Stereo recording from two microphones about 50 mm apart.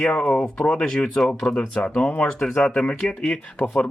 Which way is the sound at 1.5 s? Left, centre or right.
Left.